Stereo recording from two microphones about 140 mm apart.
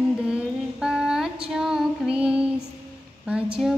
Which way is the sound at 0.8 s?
5° right (ahead or behind).